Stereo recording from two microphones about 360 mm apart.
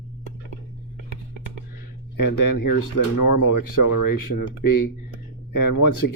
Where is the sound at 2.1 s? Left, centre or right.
Left.